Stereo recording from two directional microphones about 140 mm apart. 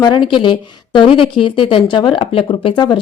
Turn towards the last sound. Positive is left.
turn(degrees=35)  # may be behind; listen again after turning